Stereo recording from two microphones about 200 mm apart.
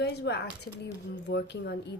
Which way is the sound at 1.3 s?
60° left (ahead or behind).